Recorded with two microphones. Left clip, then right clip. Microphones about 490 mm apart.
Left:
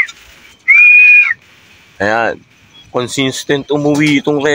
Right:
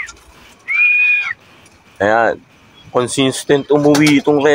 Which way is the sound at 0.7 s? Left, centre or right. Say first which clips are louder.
Left 8 dB; left.